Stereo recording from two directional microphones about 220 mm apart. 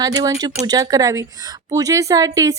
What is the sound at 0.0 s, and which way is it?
Speech, 15° right (ahead or behind).